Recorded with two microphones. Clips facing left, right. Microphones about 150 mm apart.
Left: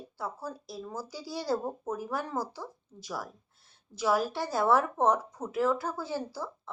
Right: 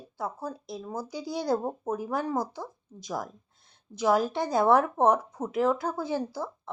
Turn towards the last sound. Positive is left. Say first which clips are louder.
# right 4 dB
turn(degrees=-15)  # may be behind; listen again after turning